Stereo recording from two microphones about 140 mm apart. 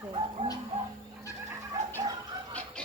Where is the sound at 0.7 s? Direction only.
50° right (ahead or behind).